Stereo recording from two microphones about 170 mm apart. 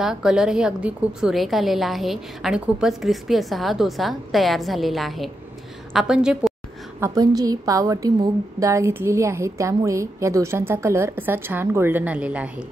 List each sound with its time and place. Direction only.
0.0 s a woman's voice: 5° right (ahead or behind)
7.0 s a woman's voice: 20° right (ahead or behind)